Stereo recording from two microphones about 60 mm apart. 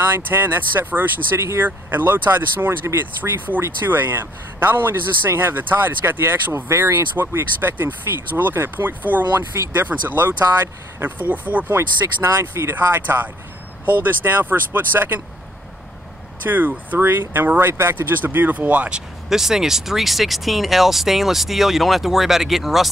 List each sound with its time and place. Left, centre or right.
0.1 s speech: right
11.7 s speech: right
12.7 s speech: right
16.4 s speech: right
19.2 s speech: centre